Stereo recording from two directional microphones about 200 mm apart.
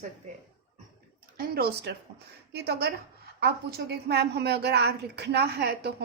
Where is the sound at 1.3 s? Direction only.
50° right (ahead or behind).